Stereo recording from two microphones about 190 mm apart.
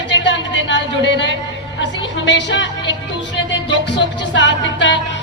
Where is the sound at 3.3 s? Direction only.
70° left (ahead or behind).